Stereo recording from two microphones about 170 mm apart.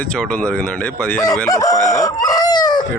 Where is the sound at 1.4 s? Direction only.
20° left (ahead or behind).